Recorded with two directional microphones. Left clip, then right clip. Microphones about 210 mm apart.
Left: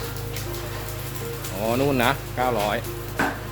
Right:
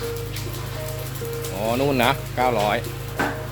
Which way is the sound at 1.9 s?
15° right (ahead or behind).